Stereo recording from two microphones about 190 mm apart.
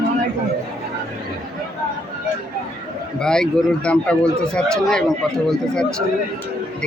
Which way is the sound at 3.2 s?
5° left (ahead or behind).